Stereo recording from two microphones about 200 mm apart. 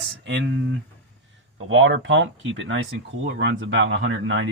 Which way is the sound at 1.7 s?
70° right (ahead or behind).